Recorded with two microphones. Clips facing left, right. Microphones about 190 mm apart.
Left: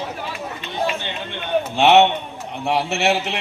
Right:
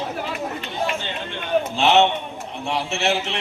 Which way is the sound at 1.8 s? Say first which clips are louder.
Left 4 dB; 60° left (ahead or behind).